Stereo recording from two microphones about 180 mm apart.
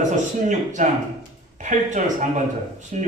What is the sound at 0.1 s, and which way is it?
Speech, 45° right (ahead or behind).